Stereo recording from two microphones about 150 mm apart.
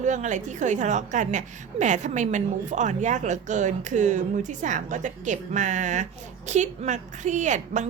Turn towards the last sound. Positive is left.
turn(degrees=-55)  # may be behind; listen again after turning